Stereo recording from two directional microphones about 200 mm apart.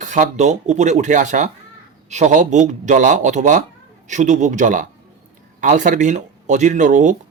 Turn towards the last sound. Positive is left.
turn(degrees=-40)  # may be behind; listen again after turning